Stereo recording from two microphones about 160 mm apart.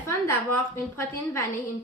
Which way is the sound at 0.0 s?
15° left (ahead or behind).